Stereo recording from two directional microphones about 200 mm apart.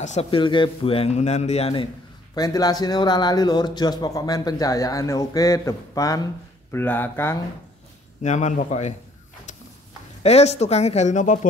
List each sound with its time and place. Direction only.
0.0 s speech: 35° left (ahead or behind)
2.3 s speech: 20° left (ahead or behind)
8.2 s speech: 35° left (ahead or behind)
10.2 s speech: 30° left (ahead or behind)